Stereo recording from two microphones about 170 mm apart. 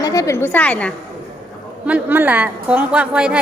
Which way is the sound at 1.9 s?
10° right (ahead or behind).